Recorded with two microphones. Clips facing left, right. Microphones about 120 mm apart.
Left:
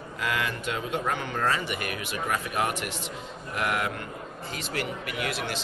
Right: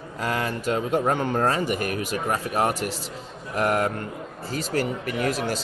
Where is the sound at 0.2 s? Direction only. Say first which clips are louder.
Right 3 dB; 35° right (ahead or behind).